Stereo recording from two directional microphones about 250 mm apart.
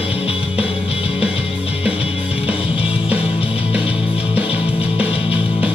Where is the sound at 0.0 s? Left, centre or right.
Left.